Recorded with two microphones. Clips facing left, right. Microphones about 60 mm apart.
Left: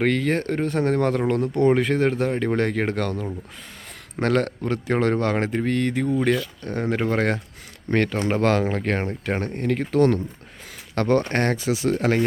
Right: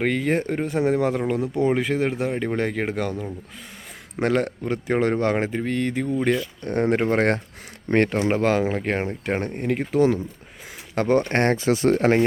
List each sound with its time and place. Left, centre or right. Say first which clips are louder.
0.0 s speech: left 1 dB; centre
5.5 s speech: left 2 dB; centre
6.6 s speech: right 3 dB; right
8.3 s speech: even; centre; by 12.2 s right